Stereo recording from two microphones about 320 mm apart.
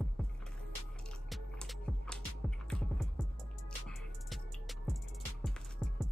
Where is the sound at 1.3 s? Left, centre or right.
Centre.